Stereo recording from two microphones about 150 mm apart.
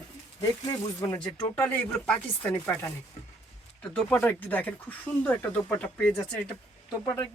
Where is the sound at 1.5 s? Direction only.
10° left (ahead or behind).